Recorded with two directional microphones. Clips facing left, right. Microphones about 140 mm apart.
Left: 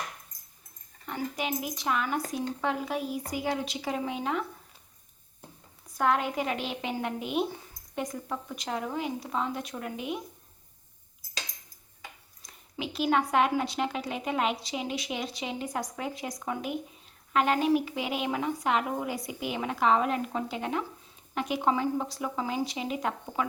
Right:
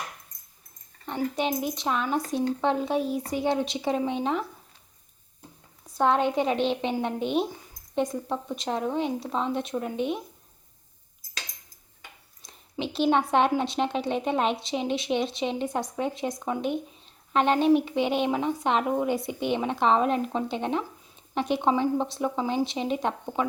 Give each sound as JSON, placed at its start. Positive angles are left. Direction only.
{"t": 1.0, "sound": "a woman's voice", "side_deg": -30}
{"t": 6.0, "sound": "a woman's voice", "side_deg": -25}
{"t": 12.4, "sound": "a woman's voice", "side_deg": -25}